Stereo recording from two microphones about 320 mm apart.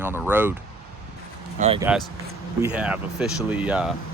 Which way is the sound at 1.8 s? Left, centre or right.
Centre.